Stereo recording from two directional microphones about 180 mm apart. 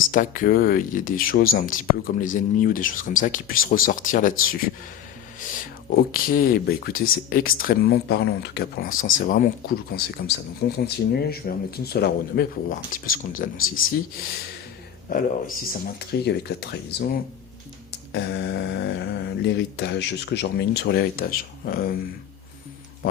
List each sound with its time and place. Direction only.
0.1 s speech: 50° left (ahead or behind)
5.4 s a sound: 45° left (ahead or behind)
6.1 s speech: 55° left (ahead or behind)
18.1 s speech: 80° left; by 21.9 s 55° left (ahead or behind)